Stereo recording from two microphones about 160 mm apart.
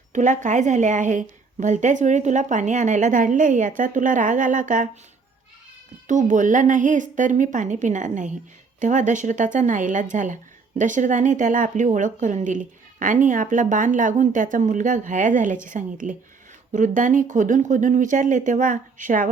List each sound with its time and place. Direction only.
0.1 s speech: 50° right (ahead or behind)
6.1 s a woman's voice: 50° right (ahead or behind)